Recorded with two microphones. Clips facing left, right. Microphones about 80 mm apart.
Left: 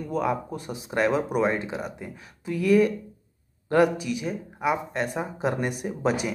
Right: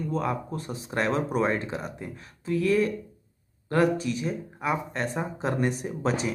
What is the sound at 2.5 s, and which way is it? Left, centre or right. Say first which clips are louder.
Speech: left 3 dB; centre.